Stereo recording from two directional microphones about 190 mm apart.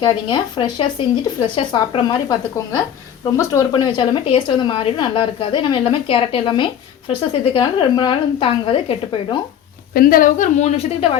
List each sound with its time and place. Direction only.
0.0 s a woman's voice: 25° left (ahead or behind)
9.9 s a woman's voice: 50° left (ahead or behind); by 11.2 s 30° left (ahead or behind)